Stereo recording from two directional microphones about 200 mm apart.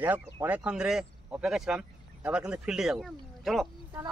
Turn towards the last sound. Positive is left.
turn(degrees=0)  # may be behind; listen again after turning